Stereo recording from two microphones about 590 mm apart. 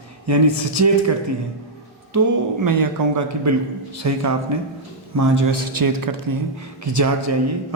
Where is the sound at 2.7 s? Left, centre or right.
Right.